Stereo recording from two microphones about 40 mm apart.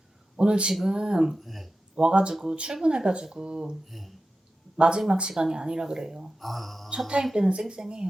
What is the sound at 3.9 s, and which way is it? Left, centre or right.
Speech, centre.